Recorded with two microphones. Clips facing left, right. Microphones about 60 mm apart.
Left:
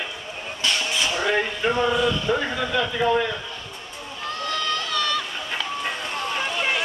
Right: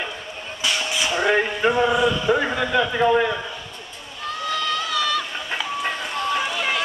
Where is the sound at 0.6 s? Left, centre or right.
Centre.